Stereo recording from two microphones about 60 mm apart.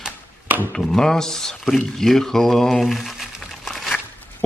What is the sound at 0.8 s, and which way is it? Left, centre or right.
A man's voice, centre.